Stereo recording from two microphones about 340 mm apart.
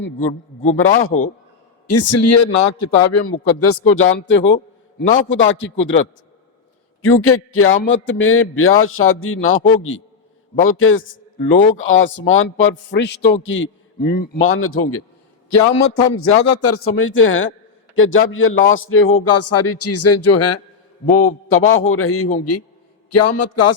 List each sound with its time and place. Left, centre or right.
0.2 s a man's voice: left
0.8 s a man's voice: left
9.6 s a man's voice: centre
10.6 s a man's voice: left
14.4 s a man's voice: left